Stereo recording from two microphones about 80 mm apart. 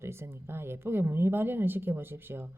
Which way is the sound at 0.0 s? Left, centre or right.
Right.